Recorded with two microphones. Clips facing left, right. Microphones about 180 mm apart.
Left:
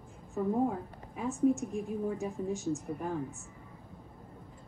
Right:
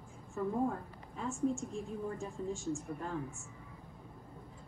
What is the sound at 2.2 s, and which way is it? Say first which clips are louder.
Speech: left 5 dB; 20° left (ahead or behind).